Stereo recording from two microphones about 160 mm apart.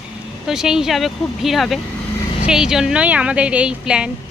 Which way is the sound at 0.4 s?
5° right (ahead or behind).